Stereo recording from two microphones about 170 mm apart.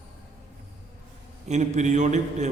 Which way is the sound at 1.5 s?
45° right (ahead or behind).